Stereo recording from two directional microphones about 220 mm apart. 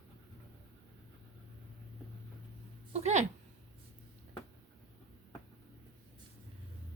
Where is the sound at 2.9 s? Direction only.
30° right (ahead or behind).